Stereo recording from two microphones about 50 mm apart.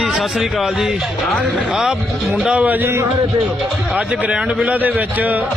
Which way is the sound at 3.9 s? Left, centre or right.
Right.